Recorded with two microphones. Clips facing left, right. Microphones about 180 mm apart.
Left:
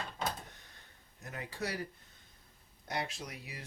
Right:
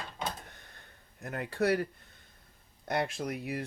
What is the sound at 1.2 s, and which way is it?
Speech, 60° right (ahead or behind).